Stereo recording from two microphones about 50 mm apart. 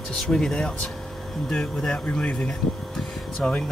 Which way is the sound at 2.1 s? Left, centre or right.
Left.